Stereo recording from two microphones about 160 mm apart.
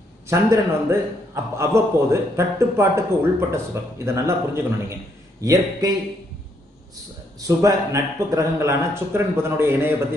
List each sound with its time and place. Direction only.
0.3 s a man's voice: 15° right (ahead or behind)
7.3 s a man's voice: 20° right (ahead or behind)